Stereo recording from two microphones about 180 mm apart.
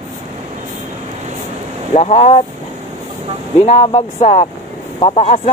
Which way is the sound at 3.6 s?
35° left (ahead or behind).